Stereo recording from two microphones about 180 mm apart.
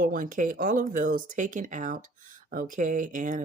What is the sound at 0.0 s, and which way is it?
Speech, 50° right (ahead or behind).